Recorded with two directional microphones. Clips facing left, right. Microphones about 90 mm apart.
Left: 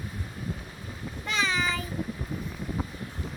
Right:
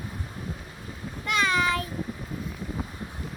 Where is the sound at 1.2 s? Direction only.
55° right (ahead or behind).